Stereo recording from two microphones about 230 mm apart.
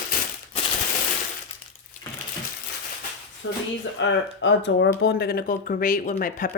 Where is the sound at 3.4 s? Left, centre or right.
Left.